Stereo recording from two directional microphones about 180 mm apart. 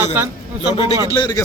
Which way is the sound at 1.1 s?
20° left (ahead or behind).